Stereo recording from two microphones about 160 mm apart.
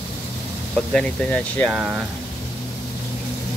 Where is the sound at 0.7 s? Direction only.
5° left (ahead or behind).